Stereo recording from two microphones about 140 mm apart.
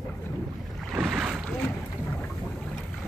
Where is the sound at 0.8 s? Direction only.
5° right (ahead or behind).